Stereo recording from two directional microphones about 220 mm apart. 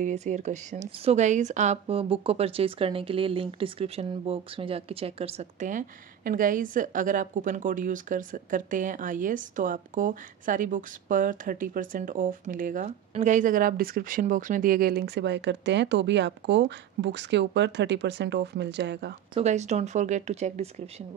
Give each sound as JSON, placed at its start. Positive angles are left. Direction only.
{"t": 0.0, "sound": "speech", "side_deg": -35}
{"t": 19.3, "sound": "speech", "side_deg": -30}